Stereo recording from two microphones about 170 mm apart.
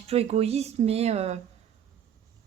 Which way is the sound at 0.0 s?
35° right (ahead or behind).